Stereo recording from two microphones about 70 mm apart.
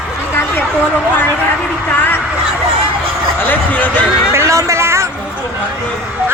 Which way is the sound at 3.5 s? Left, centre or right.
Left.